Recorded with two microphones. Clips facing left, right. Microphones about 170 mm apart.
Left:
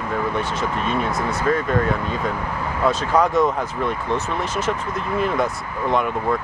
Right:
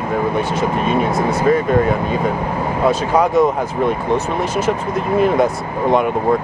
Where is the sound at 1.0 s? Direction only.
20° right (ahead or behind); by 3.7 s centre (ahead or behind).